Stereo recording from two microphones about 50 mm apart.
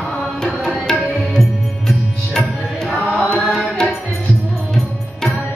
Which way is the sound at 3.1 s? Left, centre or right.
Centre.